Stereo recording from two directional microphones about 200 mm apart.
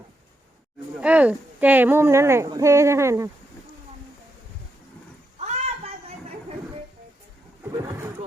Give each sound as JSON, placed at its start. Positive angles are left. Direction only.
{"t": 1.0, "sound": "speech", "side_deg": -5}
{"t": 5.5, "sound": "a sound", "side_deg": -35}
{"t": 7.6, "sound": "vehicle", "side_deg": -15}